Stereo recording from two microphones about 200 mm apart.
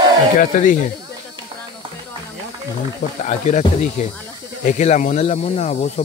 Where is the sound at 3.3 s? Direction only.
35° left (ahead or behind).